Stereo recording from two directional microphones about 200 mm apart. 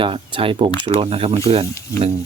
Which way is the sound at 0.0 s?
25° right (ahead or behind).